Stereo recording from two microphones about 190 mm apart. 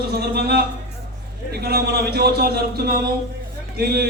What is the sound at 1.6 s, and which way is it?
A man's voice, 55° right (ahead or behind).